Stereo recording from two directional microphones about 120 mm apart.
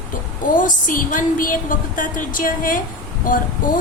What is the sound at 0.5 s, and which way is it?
A woman's voice, 90° left.